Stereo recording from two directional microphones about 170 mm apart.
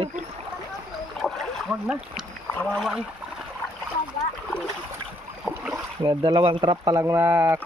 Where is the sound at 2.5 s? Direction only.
5° left (ahead or behind).